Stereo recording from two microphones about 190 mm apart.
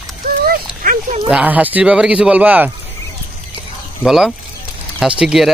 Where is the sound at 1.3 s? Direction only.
10° right (ahead or behind).